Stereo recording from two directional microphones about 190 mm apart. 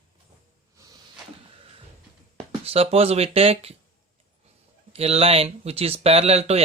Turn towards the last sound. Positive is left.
turn(degrees=-35)  # may be behind; listen again after turning